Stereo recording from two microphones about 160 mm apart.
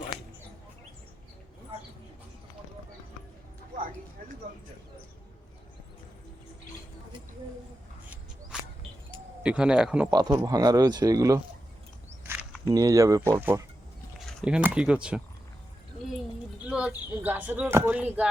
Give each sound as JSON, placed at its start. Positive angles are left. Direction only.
{"t": 8.5, "sound": "a sound", "side_deg": -5}
{"t": 9.4, "sound": "speech", "side_deg": -5}
{"t": 10.1, "sound": "speech", "side_deg": -25}
{"t": 12.2, "sound": "walk", "side_deg": -15}
{"t": 12.6, "sound": "speech", "side_deg": -20}
{"t": 14.4, "sound": "speech", "side_deg": -5}
{"t": 16.6, "sound": "speech", "side_deg": -5}